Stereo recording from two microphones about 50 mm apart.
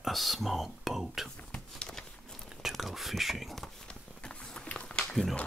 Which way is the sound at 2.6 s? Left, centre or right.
Centre.